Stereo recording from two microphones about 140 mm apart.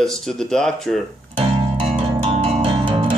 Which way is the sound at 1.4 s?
45° right (ahead or behind).